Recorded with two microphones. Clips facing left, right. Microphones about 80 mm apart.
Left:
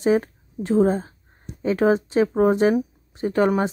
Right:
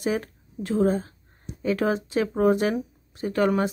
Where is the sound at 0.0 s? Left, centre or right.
Left.